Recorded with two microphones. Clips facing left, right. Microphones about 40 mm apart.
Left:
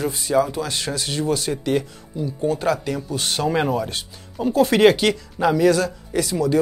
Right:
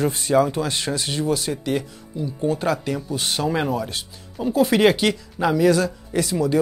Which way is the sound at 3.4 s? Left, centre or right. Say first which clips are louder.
Left 3 dB; centre.